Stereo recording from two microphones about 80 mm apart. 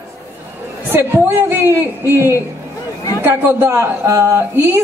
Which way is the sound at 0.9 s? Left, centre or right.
Right.